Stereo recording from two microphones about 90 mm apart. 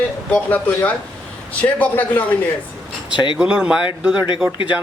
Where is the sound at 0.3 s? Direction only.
15° left (ahead or behind).